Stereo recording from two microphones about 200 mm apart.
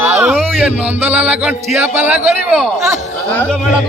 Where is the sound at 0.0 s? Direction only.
10° right (ahead or behind).